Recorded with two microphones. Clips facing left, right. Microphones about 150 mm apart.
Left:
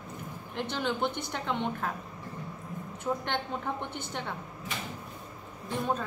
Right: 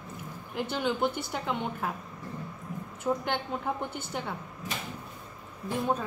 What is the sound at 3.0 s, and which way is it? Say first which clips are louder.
Speech: right 2 dB; 5° right (ahead or behind).